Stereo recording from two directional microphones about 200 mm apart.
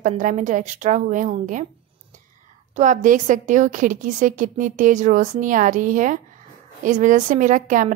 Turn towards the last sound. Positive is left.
turn(degrees=-40)  # may be behind; listen again after turning